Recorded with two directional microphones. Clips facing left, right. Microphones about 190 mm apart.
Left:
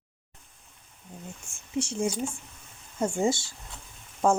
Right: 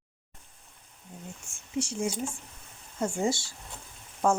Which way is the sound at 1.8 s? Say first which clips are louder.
Left 2 dB; 25° left (ahead or behind).